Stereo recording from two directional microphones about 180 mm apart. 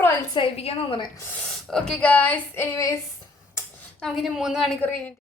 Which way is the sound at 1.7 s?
5° left (ahead or behind).